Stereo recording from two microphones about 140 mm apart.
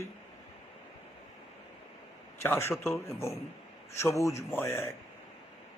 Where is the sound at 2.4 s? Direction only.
20° left (ahead or behind).